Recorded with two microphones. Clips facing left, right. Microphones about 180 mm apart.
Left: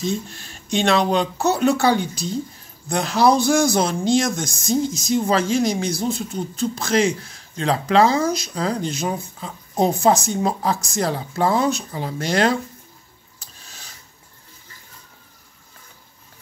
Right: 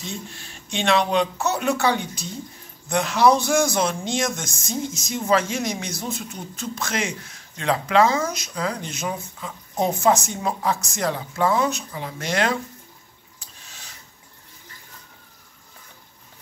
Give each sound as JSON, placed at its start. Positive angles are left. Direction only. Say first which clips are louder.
{"t": 0.0, "sound": "a man's voice", "louder": "left 9 dB", "side_deg": 40}